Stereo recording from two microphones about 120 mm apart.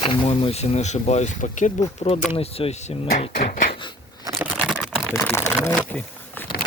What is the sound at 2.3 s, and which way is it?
Speech, 55° left (ahead or behind).